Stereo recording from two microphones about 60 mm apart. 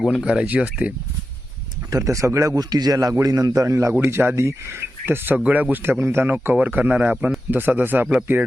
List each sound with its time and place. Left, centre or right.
0.1 s speech: centre
1.9 s a man's voice: right
4.0 s speech: right
4.4 s speech: right
5.4 s speech: right
6.5 s speech: right